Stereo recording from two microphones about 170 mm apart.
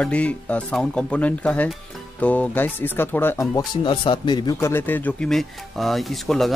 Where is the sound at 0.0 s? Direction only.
5° left (ahead or behind).